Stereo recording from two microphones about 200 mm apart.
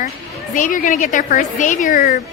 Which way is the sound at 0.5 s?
40° left (ahead or behind).